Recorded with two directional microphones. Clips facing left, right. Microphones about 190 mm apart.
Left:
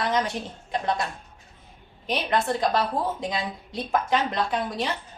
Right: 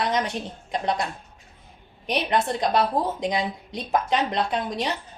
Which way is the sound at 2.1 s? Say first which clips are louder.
Right 1 dB; 20° right (ahead or behind).